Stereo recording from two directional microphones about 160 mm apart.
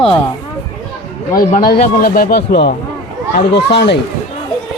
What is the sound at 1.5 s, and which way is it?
Speech, 70° left (ahead or behind).